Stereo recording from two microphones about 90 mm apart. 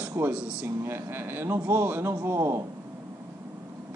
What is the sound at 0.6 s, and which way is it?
A man's voice, 25° right (ahead or behind).